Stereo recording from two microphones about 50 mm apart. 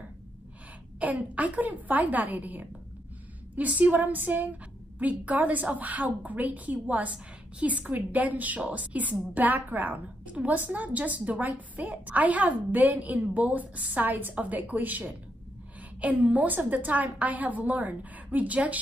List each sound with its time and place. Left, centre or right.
0.9 s a woman's voice: right